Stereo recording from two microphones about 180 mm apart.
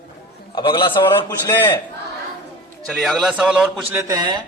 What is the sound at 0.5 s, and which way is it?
Speech, 25° left (ahead or behind).